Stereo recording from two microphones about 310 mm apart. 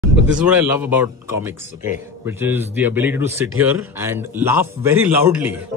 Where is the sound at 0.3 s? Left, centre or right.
Centre.